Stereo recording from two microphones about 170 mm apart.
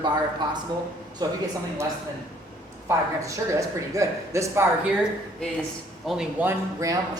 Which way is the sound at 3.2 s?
20° right (ahead or behind).